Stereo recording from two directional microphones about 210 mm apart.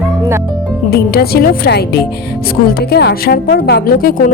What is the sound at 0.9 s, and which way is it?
A woman's voice, 45° left (ahead or behind).